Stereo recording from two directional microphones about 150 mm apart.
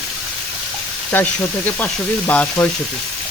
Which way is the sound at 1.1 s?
10° left (ahead or behind).